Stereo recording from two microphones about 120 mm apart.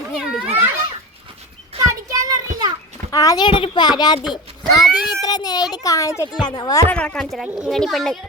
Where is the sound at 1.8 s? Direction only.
25° right (ahead or behind).